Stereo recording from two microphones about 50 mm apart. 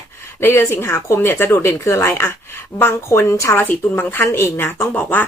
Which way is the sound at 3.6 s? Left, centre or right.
Left.